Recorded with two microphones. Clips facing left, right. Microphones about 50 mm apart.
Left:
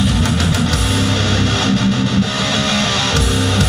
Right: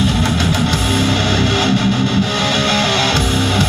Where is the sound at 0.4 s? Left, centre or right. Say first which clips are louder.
Right 1 dB; centre.